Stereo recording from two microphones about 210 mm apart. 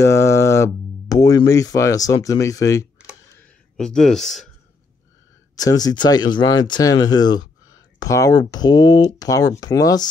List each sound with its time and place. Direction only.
0.0 s speech: 15° left (ahead or behind)
3.7 s speech: 5° left (ahead or behind)
5.6 s speech: 20° left (ahead or behind)